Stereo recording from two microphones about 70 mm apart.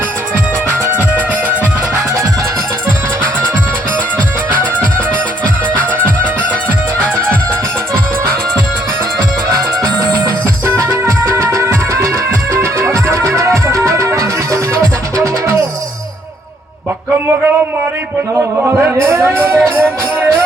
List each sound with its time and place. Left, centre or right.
10.8 s music: right
18.8 s music: right